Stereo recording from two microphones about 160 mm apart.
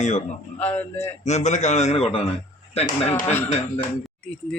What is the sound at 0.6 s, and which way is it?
Speech, 15° left (ahead or behind).